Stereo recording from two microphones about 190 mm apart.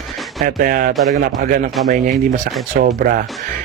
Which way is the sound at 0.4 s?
50° right (ahead or behind).